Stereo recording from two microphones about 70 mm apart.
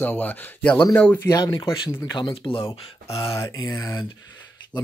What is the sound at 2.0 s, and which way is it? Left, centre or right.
Speech, left.